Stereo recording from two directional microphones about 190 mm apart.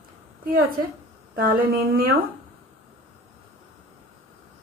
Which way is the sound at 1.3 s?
50° right (ahead or behind).